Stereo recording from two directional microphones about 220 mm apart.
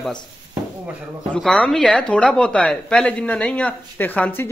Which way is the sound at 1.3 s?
5° left (ahead or behind).